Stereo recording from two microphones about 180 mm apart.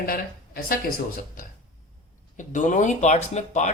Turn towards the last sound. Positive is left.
turn(degrees=40)  # may be behind; listen again after turning